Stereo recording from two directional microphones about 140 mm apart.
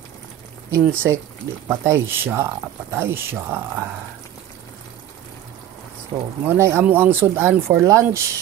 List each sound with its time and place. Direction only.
0.7 s speech: 20° right (ahead or behind)
6.4 s speech: 15° right (ahead or behind)